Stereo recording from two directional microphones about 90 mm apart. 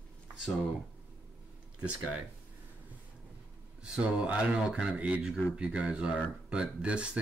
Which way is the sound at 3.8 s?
10° right (ahead or behind).